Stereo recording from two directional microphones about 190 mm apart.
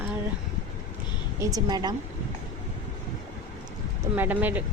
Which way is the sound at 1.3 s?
20° right (ahead or behind).